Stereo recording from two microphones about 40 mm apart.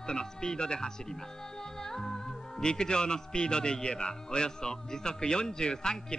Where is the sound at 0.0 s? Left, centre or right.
Centre.